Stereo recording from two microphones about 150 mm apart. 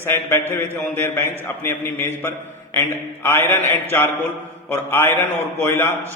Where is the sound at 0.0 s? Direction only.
15° left (ahead or behind).